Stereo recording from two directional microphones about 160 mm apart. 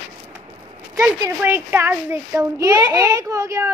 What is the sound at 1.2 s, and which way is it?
A child's voice, 15° right (ahead or behind).